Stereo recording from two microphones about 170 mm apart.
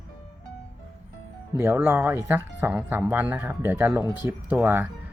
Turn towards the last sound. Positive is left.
turn(degrees=-10)  # may be behind; listen again after turning